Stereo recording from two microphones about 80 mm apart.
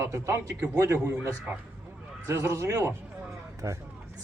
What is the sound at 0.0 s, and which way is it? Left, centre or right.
Speech, right.